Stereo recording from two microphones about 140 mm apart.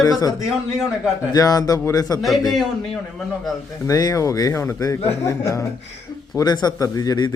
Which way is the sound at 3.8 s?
25° left (ahead or behind).